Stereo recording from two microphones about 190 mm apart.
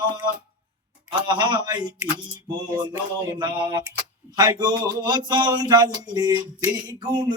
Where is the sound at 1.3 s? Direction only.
25° right (ahead or behind).